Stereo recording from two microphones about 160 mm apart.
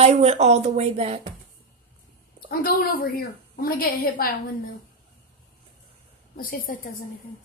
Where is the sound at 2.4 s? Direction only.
65° left (ahead or behind).